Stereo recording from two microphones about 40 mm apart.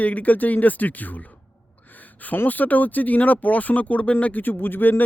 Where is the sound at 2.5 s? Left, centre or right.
Left.